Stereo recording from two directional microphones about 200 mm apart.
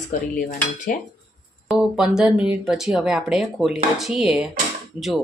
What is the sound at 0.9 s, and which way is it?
Dishes, 45° left (ahead or behind).